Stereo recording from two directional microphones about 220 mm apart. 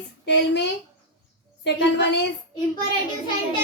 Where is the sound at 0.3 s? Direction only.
50° left (ahead or behind).